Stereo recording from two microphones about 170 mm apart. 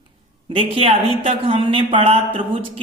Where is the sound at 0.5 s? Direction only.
35° right (ahead or behind).